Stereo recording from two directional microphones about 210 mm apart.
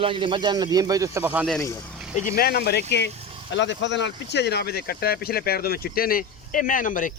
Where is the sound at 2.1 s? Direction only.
40° left (ahead or behind).